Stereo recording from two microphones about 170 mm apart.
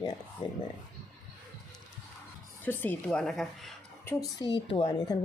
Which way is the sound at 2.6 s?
10° left (ahead or behind).